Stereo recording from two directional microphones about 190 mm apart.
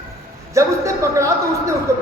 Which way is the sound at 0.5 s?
15° right (ahead or behind).